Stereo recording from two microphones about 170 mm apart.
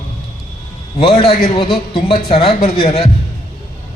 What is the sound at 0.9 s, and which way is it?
A man's voice, 35° left (ahead or behind).